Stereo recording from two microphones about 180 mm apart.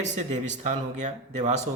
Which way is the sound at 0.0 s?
40° right (ahead or behind).